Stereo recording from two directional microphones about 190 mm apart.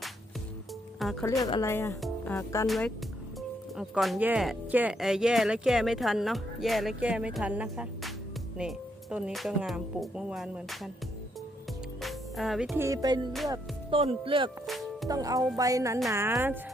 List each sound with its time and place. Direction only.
1.2 s speech: 20° left (ahead or behind)
2.0 s music: centre (ahead or behind)
2.3 s speech: 15° left (ahead or behind)
2.6 s speech: centre (ahead or behind)
12.0 s speech: centre (ahead or behind); by 13.1 s 20° right (ahead or behind)
13.5 s music: 30° right (ahead or behind)
14.7 s music: centre (ahead or behind)
15.1 s music: 20° right (ahead or behind)
15.5 s speech: 20° right (ahead or behind)